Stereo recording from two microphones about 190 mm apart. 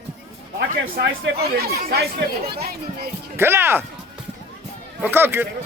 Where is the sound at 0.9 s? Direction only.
60° right (ahead or behind).